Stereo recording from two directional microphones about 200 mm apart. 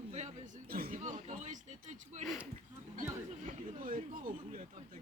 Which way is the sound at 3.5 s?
40° right (ahead or behind).